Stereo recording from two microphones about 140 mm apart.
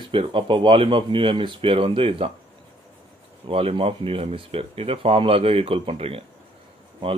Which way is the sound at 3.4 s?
40° right (ahead or behind).